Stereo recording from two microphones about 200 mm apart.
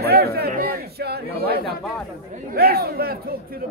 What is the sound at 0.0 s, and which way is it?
Speech, 50° right (ahead or behind).